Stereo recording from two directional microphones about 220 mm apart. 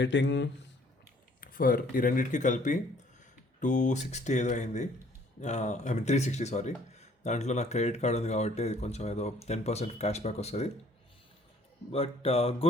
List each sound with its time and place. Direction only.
0.0 s speech: 55° left (ahead or behind)
1.4 s speech: 40° left (ahead or behind)
11.9 s mantra: 25° left (ahead or behind)